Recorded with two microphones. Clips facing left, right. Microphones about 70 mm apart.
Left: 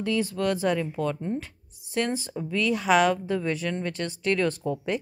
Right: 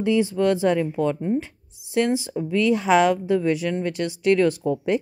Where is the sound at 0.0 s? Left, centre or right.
Centre.